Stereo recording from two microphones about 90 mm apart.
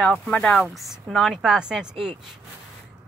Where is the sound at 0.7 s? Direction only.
Centre (ahead or behind).